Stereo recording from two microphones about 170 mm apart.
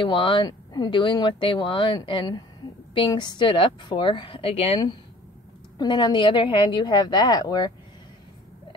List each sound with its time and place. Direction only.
0.0 s speech: 30° left (ahead or behind)